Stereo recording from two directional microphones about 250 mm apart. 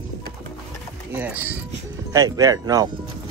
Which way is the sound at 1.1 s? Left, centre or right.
Centre.